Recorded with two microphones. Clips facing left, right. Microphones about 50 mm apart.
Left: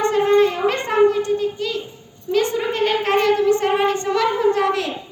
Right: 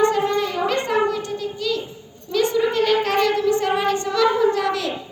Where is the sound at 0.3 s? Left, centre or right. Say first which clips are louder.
Left 6 dB; left.